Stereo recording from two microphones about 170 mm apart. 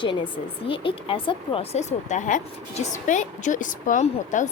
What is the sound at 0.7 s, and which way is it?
Speech, 30° left (ahead or behind).